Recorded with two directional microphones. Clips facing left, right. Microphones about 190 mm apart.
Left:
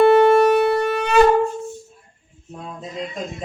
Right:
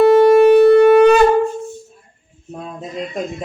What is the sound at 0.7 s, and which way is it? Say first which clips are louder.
Wind instrument: right 12 dB; 65° right (ahead or behind).